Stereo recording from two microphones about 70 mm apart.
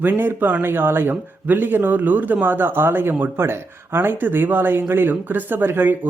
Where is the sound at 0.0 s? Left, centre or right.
Right.